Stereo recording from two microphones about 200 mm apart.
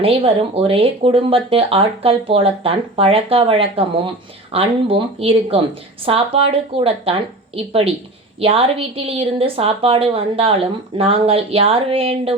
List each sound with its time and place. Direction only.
0.0 s speech: 30° right (ahead or behind)